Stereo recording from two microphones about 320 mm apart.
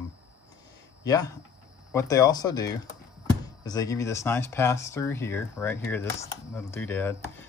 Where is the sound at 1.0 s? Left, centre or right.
Centre.